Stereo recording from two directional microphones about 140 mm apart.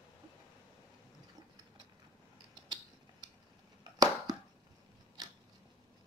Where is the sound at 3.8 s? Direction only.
25° right (ahead or behind).